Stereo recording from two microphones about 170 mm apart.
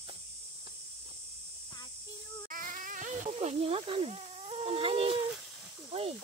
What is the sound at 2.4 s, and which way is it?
Insect, 55° right (ahead or behind).